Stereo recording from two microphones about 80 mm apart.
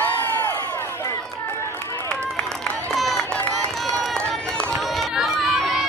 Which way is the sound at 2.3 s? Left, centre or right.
Centre.